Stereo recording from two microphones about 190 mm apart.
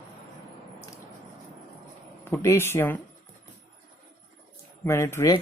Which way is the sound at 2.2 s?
15° left (ahead or behind).